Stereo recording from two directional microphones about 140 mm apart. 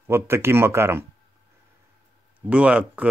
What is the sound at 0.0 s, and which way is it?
Speech, 15° right (ahead or behind).